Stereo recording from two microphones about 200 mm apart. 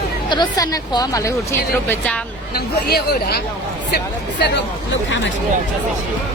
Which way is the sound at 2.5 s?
50° left (ahead or behind).